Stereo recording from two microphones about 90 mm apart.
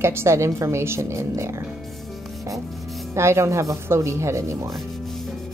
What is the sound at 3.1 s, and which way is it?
A woman's voice, 30° right (ahead or behind).